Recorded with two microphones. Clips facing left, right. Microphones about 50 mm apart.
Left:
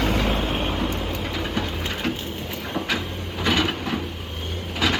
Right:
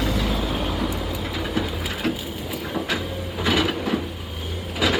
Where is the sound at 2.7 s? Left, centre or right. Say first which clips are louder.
Even; centre.